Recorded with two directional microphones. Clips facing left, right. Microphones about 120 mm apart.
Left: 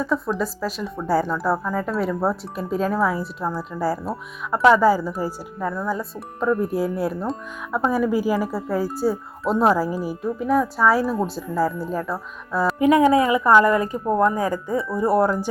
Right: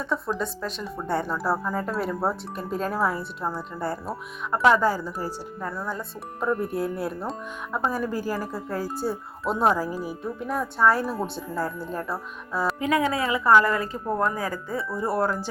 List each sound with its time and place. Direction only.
0.0 s speech: centre (ahead or behind)
5.5 s speech: centre (ahead or behind)
12.8 s a woman's voice: 20° left (ahead or behind)